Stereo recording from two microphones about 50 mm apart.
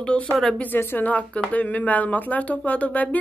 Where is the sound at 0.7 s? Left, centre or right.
Left.